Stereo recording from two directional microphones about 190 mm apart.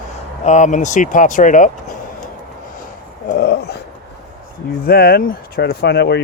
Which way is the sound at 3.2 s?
55° left (ahead or behind).